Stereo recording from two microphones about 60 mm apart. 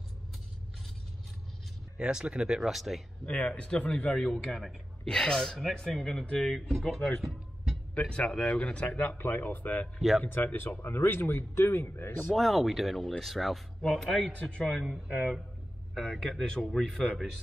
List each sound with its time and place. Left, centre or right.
2.0 s speech: centre
3.3 s speech: centre
4.1 s speech: centre
8.0 s speech: centre
9.2 s speech: left
9.9 s speech: centre
10.2 s speech: left
12.3 s speech: centre
14.2 s speech: centre
14.6 s speech: centre
15.0 s speech: centre
15.9 s speech: centre